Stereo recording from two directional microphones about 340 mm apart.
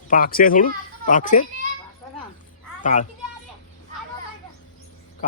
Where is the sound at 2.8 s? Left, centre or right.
Left.